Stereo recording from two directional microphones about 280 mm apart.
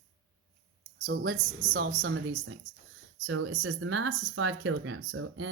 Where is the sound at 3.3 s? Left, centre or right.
Right.